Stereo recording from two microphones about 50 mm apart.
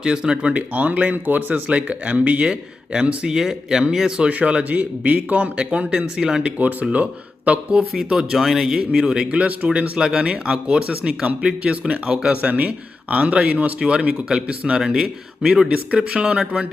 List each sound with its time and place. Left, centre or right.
0.0 s speech: centre
0.5 s speech: right; by 4.3 s centre
4.3 s speech: right
5.9 s speech: centre
6.6 s speech: right
7.7 s speech: centre
14.8 s speech: centre
15.9 s speech: right